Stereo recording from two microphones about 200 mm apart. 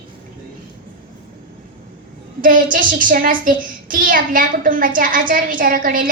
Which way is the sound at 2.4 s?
45° right (ahead or behind).